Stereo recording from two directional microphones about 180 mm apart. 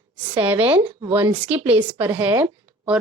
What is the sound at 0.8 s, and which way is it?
Speech, 20° right (ahead or behind).